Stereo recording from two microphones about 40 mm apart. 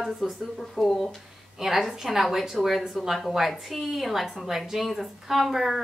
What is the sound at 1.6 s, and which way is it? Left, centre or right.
A woman's voice, centre.